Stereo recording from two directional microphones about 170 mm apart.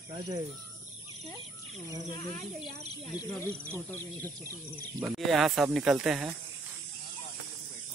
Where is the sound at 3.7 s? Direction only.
15° left (ahead or behind).